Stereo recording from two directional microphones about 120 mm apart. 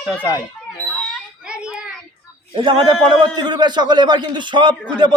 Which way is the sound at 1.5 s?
5° right (ahead or behind).